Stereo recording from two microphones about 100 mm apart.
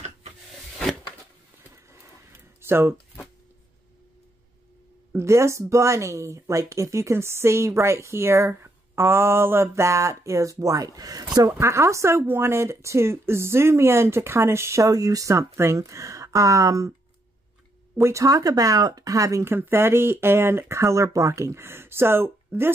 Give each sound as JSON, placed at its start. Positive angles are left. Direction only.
{"t": 2.6, "sound": "speech", "side_deg": -25}
{"t": 5.1, "sound": "speech", "side_deg": -30}
{"t": 17.9, "sound": "speech", "side_deg": -30}